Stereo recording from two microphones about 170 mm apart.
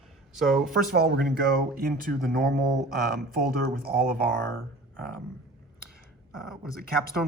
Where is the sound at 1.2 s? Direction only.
65° right (ahead or behind).